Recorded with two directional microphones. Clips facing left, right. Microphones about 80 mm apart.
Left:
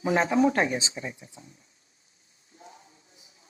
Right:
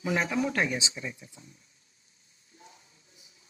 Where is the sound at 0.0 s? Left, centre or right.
Left.